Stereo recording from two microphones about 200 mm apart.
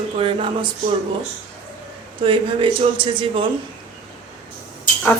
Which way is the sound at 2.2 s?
25° right (ahead or behind).